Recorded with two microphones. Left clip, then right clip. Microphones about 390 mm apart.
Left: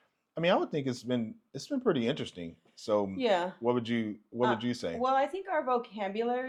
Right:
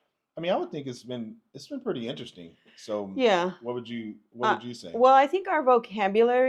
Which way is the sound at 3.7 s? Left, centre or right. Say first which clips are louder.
Left 4 dB; left.